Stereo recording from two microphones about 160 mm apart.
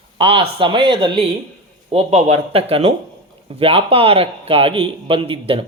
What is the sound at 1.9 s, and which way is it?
A man's voice, 45° right (ahead or behind).